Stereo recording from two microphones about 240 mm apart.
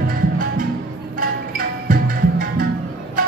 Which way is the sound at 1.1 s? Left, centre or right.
Right.